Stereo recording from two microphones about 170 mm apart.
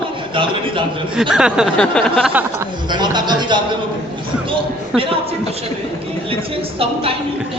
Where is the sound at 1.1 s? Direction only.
5° right (ahead or behind).